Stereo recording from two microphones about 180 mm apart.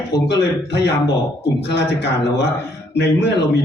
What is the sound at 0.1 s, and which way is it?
A man's voice, 70° left (ahead or behind).